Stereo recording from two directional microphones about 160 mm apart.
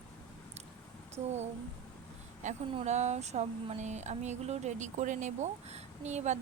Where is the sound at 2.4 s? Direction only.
50° right (ahead or behind).